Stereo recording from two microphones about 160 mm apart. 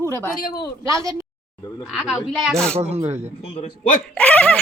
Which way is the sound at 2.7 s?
40° right (ahead or behind).